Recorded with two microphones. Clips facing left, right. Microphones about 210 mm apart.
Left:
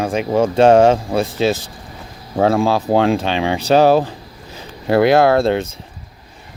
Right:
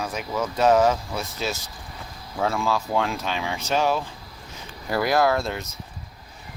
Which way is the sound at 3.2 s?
90° left.